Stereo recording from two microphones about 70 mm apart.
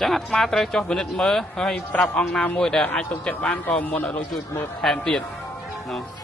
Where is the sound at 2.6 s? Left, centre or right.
Centre.